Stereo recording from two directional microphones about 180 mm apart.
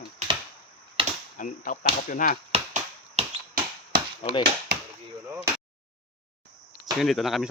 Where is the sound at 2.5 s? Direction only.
40° right (ahead or behind).